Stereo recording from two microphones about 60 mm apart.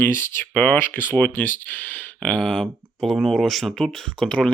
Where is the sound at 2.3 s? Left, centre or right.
Centre.